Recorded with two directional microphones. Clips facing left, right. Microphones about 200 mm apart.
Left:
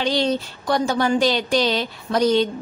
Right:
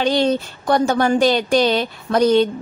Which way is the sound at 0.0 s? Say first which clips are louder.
Right 4 dB; 50° right (ahead or behind).